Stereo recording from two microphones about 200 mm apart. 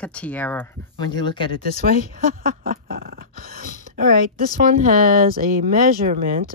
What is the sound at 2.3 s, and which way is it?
Dog, 45° right (ahead or behind).